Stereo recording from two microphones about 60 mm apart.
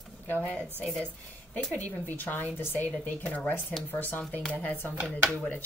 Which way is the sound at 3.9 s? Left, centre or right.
Left.